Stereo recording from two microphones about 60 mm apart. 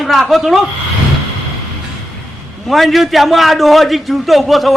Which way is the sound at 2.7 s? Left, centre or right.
Centre.